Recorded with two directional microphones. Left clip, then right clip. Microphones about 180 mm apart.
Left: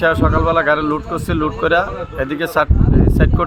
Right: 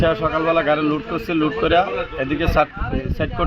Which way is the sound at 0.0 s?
15° left (ahead or behind).